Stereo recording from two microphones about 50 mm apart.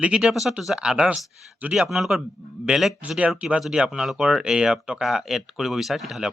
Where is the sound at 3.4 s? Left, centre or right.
Centre.